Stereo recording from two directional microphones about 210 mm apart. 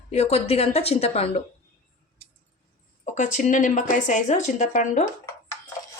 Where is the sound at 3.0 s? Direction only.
35° left (ahead or behind).